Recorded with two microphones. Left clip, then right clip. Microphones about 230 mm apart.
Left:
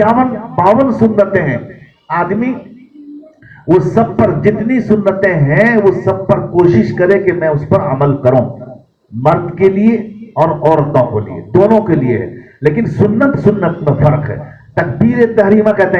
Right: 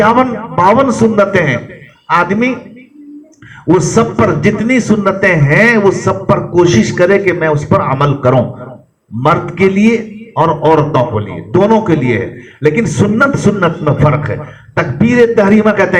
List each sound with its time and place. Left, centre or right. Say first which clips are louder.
0.0 s a man's voice: right 1 dB; right
3.7 s a man's voice: even; right